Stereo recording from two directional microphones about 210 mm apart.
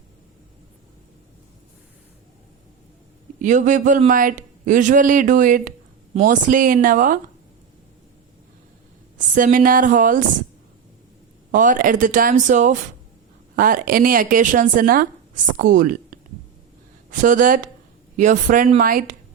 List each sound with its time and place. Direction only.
3.4 s a man's voice: 35° right (ahead or behind)
9.1 s a man's voice: 40° right (ahead or behind)
11.5 s a man's voice: 40° right (ahead or behind)